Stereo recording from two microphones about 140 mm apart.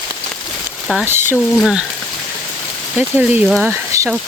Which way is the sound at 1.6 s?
Centre (ahead or behind).